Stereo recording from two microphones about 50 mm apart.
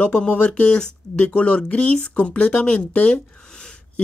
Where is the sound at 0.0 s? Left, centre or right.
Left.